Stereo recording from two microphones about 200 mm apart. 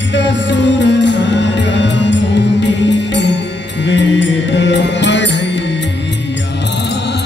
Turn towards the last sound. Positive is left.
turn(degrees=60)  # may be behind; listen again after turning